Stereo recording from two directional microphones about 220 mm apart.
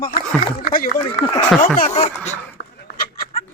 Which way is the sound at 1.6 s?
40° left (ahead or behind).